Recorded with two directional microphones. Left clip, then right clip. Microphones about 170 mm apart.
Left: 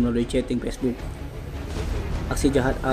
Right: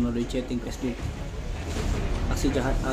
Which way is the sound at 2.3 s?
30° left (ahead or behind).